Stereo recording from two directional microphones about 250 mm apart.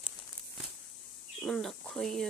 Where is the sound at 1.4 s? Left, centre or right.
Centre.